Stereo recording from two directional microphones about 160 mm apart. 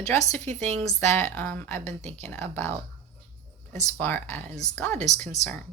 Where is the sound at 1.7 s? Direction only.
45° right (ahead or behind).